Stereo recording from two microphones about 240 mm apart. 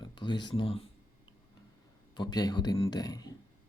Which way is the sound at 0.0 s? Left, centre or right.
Centre.